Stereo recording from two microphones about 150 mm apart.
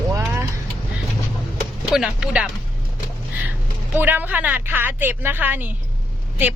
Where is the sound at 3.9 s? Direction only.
10° right (ahead or behind).